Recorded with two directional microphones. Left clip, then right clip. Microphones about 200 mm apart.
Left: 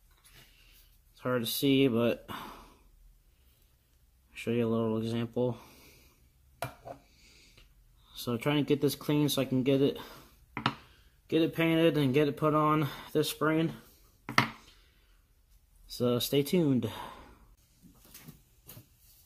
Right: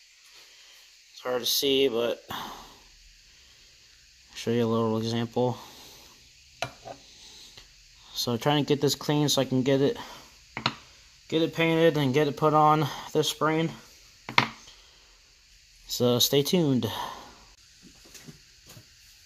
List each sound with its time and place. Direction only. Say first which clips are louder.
1.1 s speech: right 5 dB; 35° right (ahead or behind)
4.3 s speech: right 5 dB; 35° right (ahead or behind)
8.1 s speech: right 6 dB; 35° right (ahead or behind)
11.2 s speech: right 3 dB; 30° right (ahead or behind)
15.9 s speech: right 6 dB; 35° right (ahead or behind)